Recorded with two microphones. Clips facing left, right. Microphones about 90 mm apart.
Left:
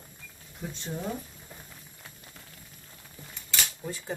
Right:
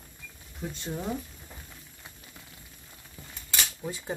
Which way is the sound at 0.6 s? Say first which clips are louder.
Right 2 dB; centre (ahead or behind).